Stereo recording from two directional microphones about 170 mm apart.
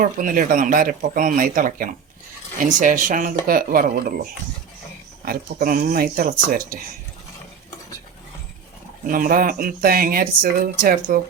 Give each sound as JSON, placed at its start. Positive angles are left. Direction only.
{"t": 0.0, "sound": "speech", "side_deg": -50}
{"t": 9.0, "sound": "speech", "side_deg": -55}